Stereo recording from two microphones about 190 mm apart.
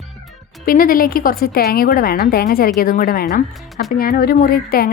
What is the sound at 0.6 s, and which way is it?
Speech, 50° left (ahead or behind).